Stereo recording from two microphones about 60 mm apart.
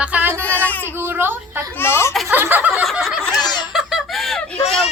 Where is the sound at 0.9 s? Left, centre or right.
Right.